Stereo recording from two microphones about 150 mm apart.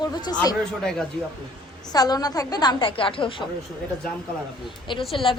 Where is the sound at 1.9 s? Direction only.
25° left (ahead or behind).